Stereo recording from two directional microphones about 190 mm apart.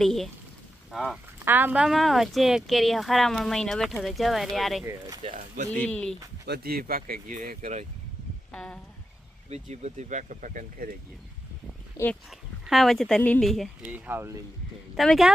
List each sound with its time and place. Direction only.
0.0 s speech: centre (ahead or behind)
4.9 s speech: 20° right (ahead or behind)
5.2 s speech: 40° right (ahead or behind)
5.8 s speech: 5° left (ahead or behind)
6.4 s speech: 55° right (ahead or behind)
8.5 s speech: 5° left (ahead or behind)
9.5 s speech: 35° right (ahead or behind)
12.0 s speech: 20° left (ahead or behind)
12.3 s speech: centre (ahead or behind)
14.9 s speech: centre (ahead or behind)